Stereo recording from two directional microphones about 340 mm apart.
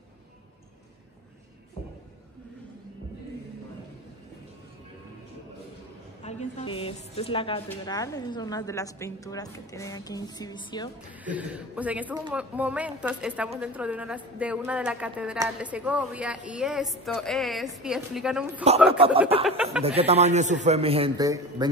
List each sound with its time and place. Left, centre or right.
6.2 s a woman's voice: centre
11.2 s a woman's voice: centre
18.9 s a man's voice: centre
19.4 s a woman's voice: centre
20.0 s a man's voice: centre